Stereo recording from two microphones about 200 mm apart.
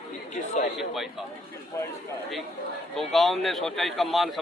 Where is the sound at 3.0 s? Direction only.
Centre (ahead or behind).